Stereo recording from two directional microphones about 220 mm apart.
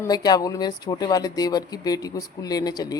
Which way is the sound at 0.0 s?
15° left (ahead or behind).